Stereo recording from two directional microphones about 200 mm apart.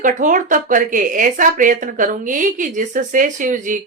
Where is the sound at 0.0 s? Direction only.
40° right (ahead or behind).